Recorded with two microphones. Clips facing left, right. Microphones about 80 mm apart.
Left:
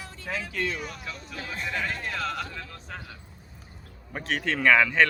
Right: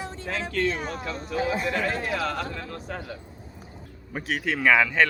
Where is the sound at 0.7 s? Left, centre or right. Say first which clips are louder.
Right 5 dB; right.